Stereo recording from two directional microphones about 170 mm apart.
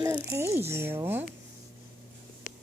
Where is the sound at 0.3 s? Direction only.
15° right (ahead or behind).